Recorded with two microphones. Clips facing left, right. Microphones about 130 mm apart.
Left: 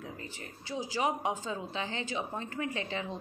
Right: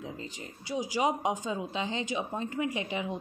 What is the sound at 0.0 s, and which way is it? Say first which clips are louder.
Speech: right 3 dB; 20° right (ahead or behind).